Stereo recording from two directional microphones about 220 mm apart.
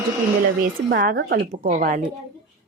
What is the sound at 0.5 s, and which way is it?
A woman's voice, 40° right (ahead or behind).